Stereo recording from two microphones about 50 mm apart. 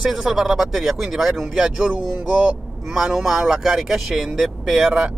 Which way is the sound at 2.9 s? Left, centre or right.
Centre.